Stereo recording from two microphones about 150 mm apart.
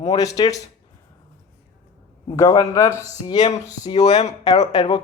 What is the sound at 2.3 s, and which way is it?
Speech, 25° left (ahead or behind).